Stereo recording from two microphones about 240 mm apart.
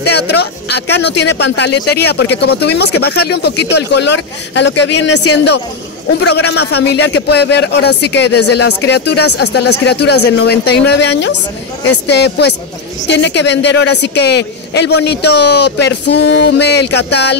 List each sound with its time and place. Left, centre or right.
0.0 s a man's voice: left